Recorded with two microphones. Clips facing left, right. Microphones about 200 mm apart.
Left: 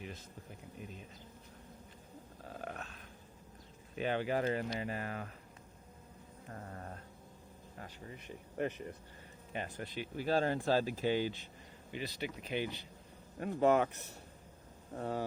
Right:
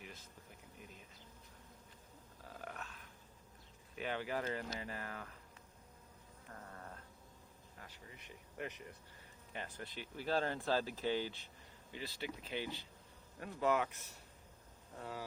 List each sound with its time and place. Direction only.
2.5 s a sound: 25° left (ahead or behind)
3.9 s speech: 25° left (ahead or behind)
6.5 s a sound: 35° left (ahead or behind)
7.8 s speech: 40° left (ahead or behind)
9.5 s speech: 15° left (ahead or behind)
13.7 s speech: 40° left (ahead or behind)
14.9 s speech: 55° left (ahead or behind)